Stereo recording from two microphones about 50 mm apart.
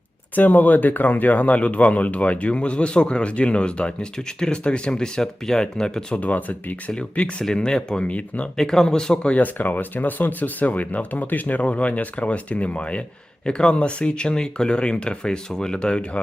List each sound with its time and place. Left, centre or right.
0.3 s speech: left; by 6.1 s centre
6.1 s speech: left
8.5 s speech: centre
9.3 s speech: left